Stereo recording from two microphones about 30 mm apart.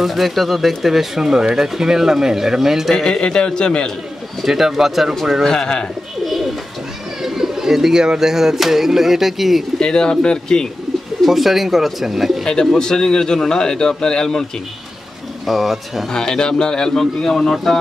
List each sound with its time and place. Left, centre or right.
0.0 s speech: centre
3.3 s a man's voice: left
4.4 s speech: centre
5.4 s a man's voice: centre
6.2 s bird: centre
7.2 s speech: centre
9.8 s a man's voice: left
11.2 s speech: centre
12.4 s a man's voice: left
15.4 s speech: centre
16.1 s a man's voice: left